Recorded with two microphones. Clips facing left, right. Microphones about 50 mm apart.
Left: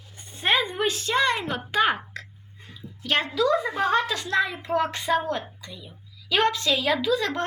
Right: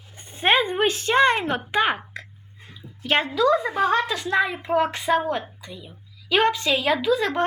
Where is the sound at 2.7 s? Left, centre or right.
Right.